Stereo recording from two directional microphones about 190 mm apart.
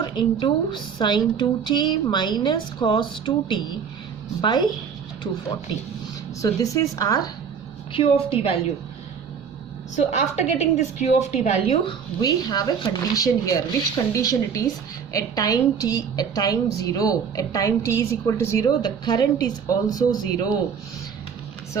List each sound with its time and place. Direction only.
0.0 s a woman's voice: 25° left (ahead or behind)
6.4 s speech: 15° left (ahead or behind)
7.9 s a woman's voice: 30° left (ahead or behind)
9.9 s a woman's voice: 40° left (ahead or behind); by 20.5 s 20° left (ahead or behind)